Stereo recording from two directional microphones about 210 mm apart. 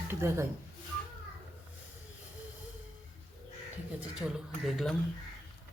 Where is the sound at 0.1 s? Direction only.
10° right (ahead or behind).